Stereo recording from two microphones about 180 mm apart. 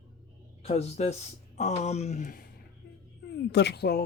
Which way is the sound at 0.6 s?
35° left (ahead or behind).